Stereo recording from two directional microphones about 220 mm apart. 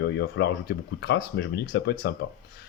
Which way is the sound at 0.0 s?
50° left (ahead or behind).